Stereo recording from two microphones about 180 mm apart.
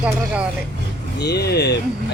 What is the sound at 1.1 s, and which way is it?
Speech, 65° left (ahead or behind).